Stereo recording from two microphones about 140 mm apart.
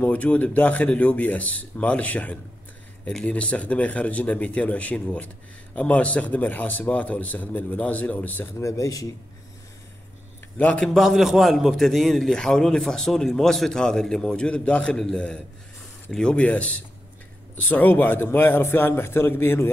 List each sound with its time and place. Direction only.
0.0 s a man's voice: 10° left (ahead or behind)
10.6 s a man's voice: 5° left (ahead or behind)